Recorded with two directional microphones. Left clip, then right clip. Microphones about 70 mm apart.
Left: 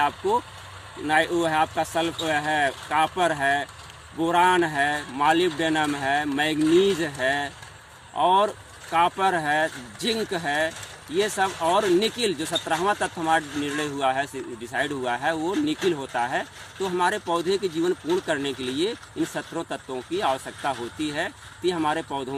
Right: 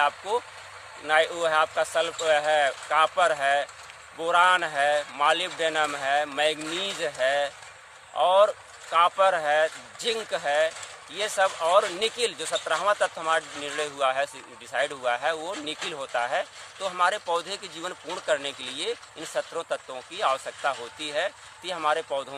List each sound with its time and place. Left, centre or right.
1.0 s speech: right
2.0 s speech: centre
2.9 s speech: right
5.5 s speech: right
6.6 s speech: right
7.0 s speech: right
9.0 s speech: right
15.5 s speech: right